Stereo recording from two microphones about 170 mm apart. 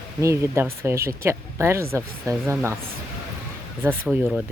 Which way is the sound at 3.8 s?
10° right (ahead or behind).